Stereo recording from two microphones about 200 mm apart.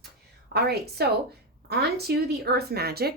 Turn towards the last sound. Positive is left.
turn(degrees=-50)  # may be behind; listen again after turning